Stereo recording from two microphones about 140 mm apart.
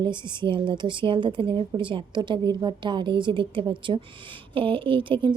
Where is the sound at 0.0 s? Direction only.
35° right (ahead or behind).